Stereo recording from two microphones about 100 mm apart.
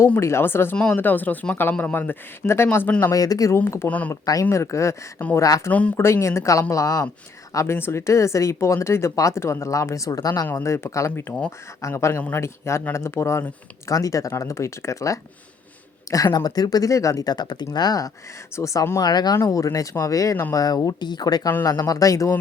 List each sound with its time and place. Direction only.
0.2 s speech: 25° left (ahead or behind)
3.0 s speech: 35° left (ahead or behind)
3.8 s speech: 15° left (ahead or behind)
4.1 s speech: 35° left (ahead or behind)
10.4 s speech: 25° left (ahead or behind)
11.8 s speech: 30° left (ahead or behind)